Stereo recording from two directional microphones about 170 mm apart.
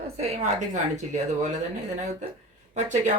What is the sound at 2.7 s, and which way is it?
Speech, 45° right (ahead or behind).